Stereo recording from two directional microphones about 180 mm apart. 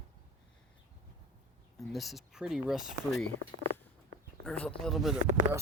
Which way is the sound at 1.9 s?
Centre (ahead or behind).